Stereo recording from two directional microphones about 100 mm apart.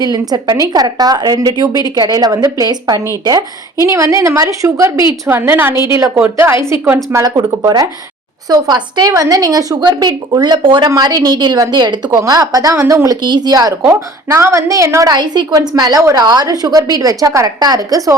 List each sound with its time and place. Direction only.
0.0 s a woman's voice: 40° right (ahead or behind)
5.3 s a woman's voice: 20° right (ahead or behind)
6.5 s a woman's voice: 25° right (ahead or behind); by 10.8 s 55° right (ahead or behind)
10.8 s a woman's voice: 40° right (ahead or behind)
13.8 s a woman's voice: 25° right (ahead or behind)
15.1 s a woman's voice: 45° right (ahead or behind)